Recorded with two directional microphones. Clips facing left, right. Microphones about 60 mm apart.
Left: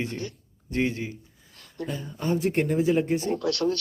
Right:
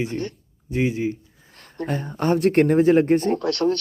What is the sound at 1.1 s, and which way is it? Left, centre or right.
Speech, right.